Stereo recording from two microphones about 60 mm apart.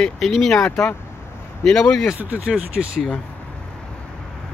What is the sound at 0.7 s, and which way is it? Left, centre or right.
Speech, centre.